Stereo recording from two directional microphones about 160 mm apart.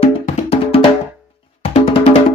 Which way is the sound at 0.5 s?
35° left (ahead or behind).